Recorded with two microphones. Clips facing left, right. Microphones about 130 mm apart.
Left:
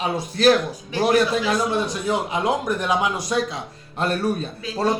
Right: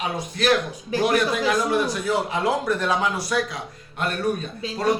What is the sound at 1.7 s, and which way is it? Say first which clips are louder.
Speech: even; 20° left (ahead or behind).